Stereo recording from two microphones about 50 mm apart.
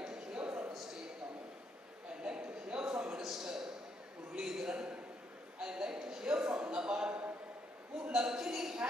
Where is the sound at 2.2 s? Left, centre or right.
Centre.